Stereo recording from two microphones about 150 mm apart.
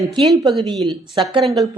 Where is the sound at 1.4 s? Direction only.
Centre (ahead or behind).